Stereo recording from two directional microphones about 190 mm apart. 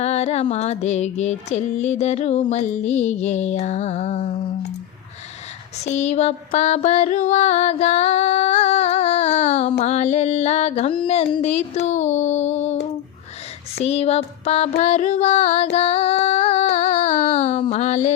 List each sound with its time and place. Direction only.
0.0 s music: 35° left (ahead or behind)
5.8 s music: 35° left (ahead or behind)
13.8 s music: 35° left (ahead or behind)